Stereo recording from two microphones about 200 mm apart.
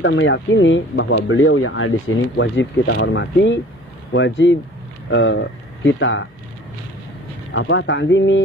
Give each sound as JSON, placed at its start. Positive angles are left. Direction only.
{"t": 0.0, "sound": "speech", "side_deg": 65}
{"t": 7.5, "sound": "speech", "side_deg": 70}